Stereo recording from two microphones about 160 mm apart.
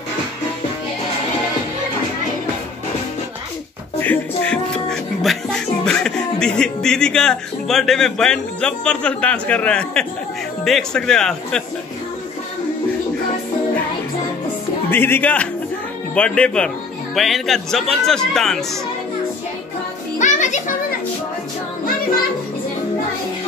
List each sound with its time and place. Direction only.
4.0 s music: 10° left (ahead or behind)
5.9 s a man's voice: 5° left (ahead or behind)
14.9 s a man's voice: 15° left (ahead or behind)
20.2 s music: 50° left (ahead or behind)